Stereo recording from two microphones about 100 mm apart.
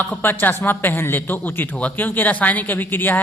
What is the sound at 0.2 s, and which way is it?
A man's voice, 20° left (ahead or behind).